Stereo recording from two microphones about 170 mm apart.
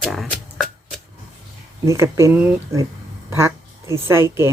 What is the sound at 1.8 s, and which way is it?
A woman's voice, 15° right (ahead or behind).